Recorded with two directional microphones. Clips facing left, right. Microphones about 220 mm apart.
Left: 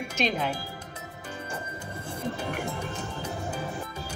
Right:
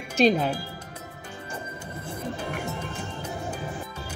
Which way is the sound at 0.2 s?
35° right (ahead or behind).